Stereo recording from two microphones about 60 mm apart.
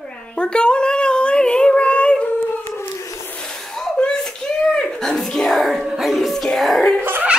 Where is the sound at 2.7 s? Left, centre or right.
Left.